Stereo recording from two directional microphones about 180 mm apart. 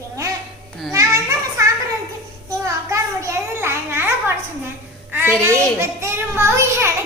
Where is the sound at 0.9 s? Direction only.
15° right (ahead or behind).